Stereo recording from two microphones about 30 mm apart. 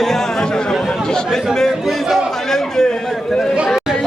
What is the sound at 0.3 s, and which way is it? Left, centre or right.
Chatter, left.